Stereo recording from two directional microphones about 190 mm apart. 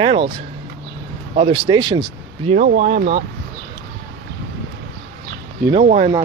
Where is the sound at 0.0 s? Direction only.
25° right (ahead or behind).